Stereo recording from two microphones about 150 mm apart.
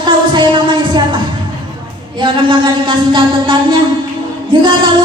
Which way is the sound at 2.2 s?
35° right (ahead or behind).